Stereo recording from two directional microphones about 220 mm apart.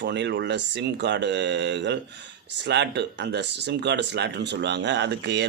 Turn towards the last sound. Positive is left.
turn(degrees=-50)  # may be behind; listen again after turning